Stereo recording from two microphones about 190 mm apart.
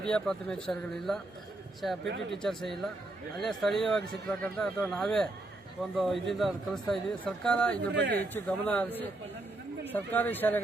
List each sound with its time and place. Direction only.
0.0 s speech: 5° left (ahead or behind)
7.9 s speech: 65° right (ahead or behind)
8.2 s speech: 5° left (ahead or behind)
9.9 s speech: 10° left (ahead or behind)